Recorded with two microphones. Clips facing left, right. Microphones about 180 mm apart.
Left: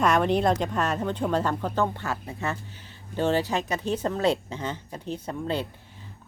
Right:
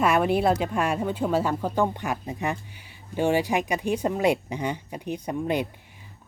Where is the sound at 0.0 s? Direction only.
5° right (ahead or behind).